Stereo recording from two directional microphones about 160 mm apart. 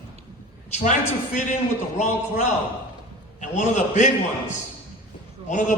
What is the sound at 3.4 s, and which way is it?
A man's voice, 50° left (ahead or behind).